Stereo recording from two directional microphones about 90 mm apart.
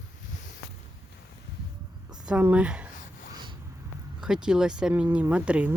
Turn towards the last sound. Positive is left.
turn(degrees=-15)  # may be behind; listen again after turning